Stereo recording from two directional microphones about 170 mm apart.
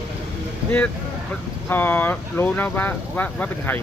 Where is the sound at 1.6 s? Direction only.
10° left (ahead or behind).